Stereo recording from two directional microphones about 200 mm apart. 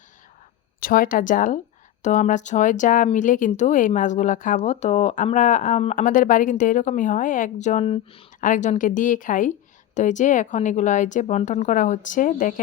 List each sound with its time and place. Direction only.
0.8 s speech: 45° left (ahead or behind)